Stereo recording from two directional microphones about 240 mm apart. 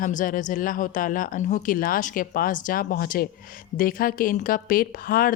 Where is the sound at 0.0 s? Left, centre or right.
Left.